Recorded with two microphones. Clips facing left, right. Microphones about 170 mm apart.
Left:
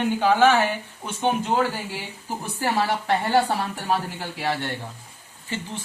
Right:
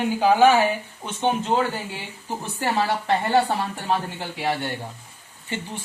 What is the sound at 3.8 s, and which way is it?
Speech, centre (ahead or behind).